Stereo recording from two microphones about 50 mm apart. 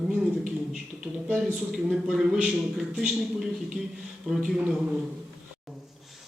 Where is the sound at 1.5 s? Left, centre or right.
Centre.